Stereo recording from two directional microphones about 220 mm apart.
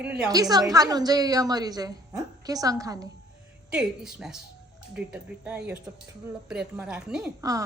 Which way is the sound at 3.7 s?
5° right (ahead or behind).